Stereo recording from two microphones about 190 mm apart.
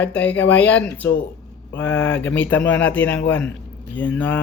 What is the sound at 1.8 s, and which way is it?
Speech, 75° left (ahead or behind).